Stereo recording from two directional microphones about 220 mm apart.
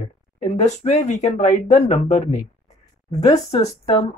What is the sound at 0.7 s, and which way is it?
Speech, 30° left (ahead or behind).